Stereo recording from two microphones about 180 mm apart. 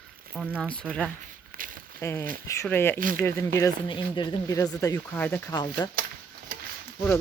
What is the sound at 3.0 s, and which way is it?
Speech, 50° right (ahead or behind).